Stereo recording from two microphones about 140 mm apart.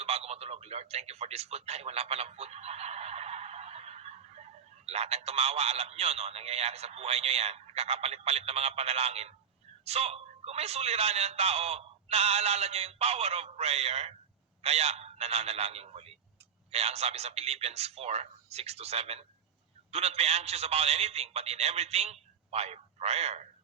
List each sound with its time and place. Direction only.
0.0 s radio: 50° right (ahead or behind)
4.9 s a man's voice: 50° right (ahead or behind)